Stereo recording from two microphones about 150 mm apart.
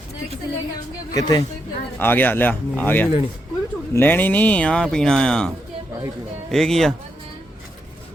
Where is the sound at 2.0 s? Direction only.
15° left (ahead or behind).